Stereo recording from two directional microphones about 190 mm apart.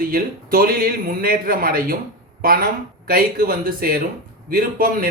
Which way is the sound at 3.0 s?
50° right (ahead or behind).